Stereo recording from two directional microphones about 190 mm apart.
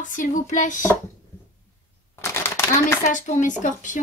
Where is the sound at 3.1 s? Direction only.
40° left (ahead or behind).